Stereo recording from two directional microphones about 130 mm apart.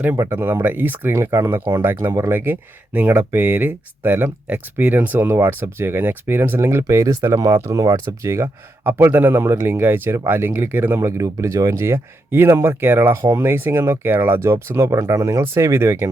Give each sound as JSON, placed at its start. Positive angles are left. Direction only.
{"t": 0.0, "sound": "speech", "side_deg": -15}